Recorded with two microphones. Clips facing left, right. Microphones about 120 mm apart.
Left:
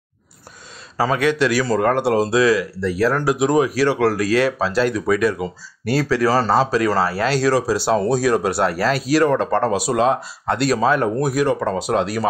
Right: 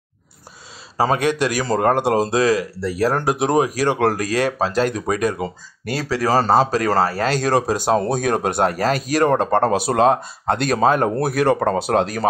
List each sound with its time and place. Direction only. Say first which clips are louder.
0.9 s speech: even; 40° right (ahead or behind)
11.2 s speech: right 1 dB; 60° right (ahead or behind)